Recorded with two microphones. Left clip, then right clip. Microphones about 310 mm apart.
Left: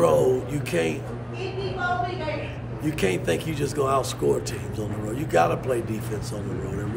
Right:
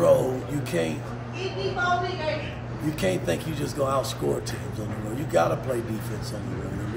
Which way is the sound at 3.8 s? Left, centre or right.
Centre.